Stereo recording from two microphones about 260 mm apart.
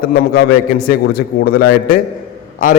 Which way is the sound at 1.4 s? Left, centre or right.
Left.